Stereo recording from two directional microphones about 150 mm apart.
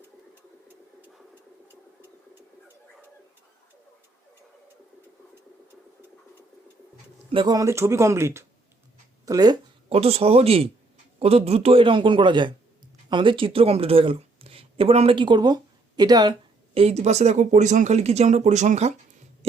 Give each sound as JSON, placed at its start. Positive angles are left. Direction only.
{"t": 7.3, "sound": "speech", "side_deg": -30}
{"t": 9.9, "sound": "a man's voice", "side_deg": -40}
{"t": 16.7, "sound": "speech", "side_deg": -45}